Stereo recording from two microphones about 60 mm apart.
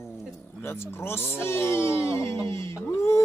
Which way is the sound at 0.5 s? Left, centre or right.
Left.